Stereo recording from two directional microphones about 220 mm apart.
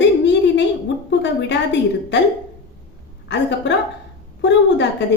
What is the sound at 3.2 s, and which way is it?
A woman's voice, 50° left (ahead or behind).